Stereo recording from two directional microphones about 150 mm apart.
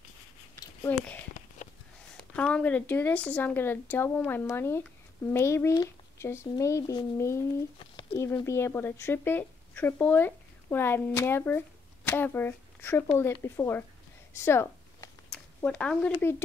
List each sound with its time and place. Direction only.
0.8 s a child's voice: 10° left (ahead or behind)
7.8 s speech: 30° left (ahead or behind)
14.3 s a sound: 15° left (ahead or behind)
16.2 s speech: 15° left (ahead or behind)